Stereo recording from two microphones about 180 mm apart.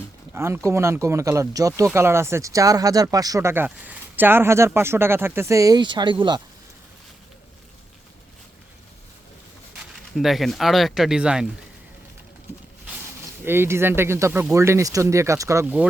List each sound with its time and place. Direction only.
0.3 s speech: 15° right (ahead or behind)
10.2 s speech: centre (ahead or behind)
13.4 s speech: 15° right (ahead or behind)